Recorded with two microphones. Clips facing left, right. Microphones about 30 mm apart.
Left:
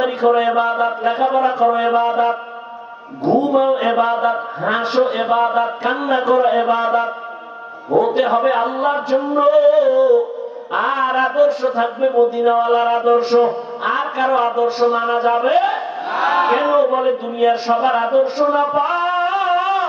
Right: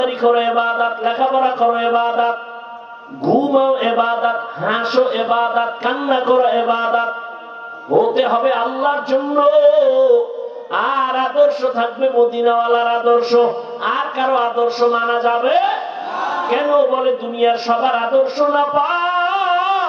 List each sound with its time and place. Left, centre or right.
0.0 s mantra: right
8.1 s mantra: right
16.0 s crowd: left
16.8 s mantra: right
17.8 s music: right